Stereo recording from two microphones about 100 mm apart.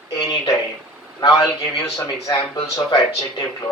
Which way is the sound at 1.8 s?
35° left (ahead or behind).